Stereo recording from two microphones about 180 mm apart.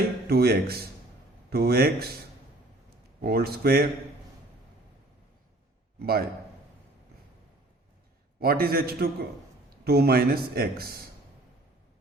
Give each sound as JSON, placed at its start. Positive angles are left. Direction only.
{"t": 0.3, "sound": "a man's voice", "side_deg": -60}
{"t": 3.2, "sound": "a man's voice", "side_deg": -60}
{"t": 6.0, "sound": "a man's voice", "side_deg": -60}
{"t": 8.4, "sound": "a man's voice", "side_deg": -55}